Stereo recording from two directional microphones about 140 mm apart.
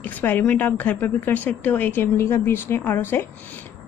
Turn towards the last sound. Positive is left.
turn(degrees=15)  # may be behind; listen again after turning